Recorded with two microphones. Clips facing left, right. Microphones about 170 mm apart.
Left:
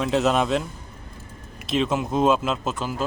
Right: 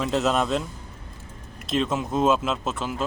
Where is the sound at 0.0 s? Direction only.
Centre (ahead or behind).